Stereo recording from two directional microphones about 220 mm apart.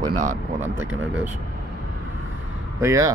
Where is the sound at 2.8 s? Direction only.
15° right (ahead or behind).